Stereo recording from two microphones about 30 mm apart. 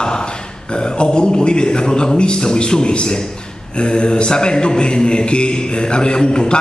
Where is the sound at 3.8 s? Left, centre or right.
Left.